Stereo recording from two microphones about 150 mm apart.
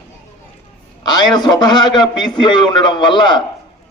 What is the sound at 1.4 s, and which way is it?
A man's voice, 30° left (ahead or behind).